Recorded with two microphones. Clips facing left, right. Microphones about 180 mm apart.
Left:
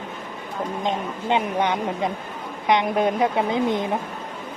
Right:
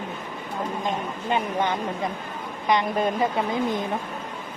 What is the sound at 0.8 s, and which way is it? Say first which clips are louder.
Speech: left 2 dB; 20° left (ahead or behind).